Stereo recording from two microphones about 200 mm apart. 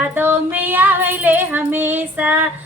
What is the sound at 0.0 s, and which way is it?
Female singing, 10° right (ahead or behind).